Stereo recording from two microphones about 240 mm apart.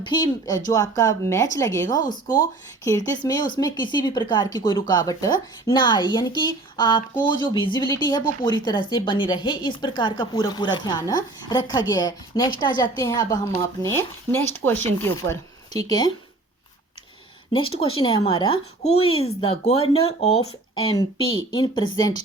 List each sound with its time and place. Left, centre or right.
0.0 s speech: centre
2.0 s speech: left
2.4 s speech: centre
17.5 s speech: left